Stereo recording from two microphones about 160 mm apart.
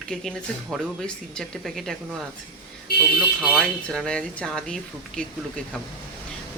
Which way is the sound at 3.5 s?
5° left (ahead or behind).